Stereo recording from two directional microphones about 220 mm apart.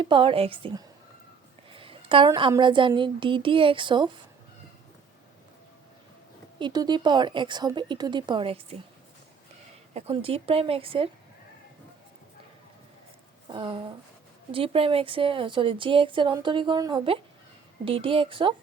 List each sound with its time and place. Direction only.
0.0 s a woman's voice: 25° right (ahead or behind)
6.6 s a woman's voice: 20° right (ahead or behind)
9.9 s a woman's voice: 25° right (ahead or behind)
13.5 s a woman's voice: 20° right (ahead or behind)